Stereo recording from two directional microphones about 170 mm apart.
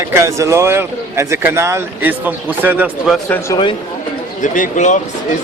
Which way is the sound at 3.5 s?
25° left (ahead or behind).